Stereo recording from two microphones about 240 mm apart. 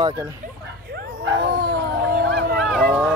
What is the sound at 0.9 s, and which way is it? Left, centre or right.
Dog, right.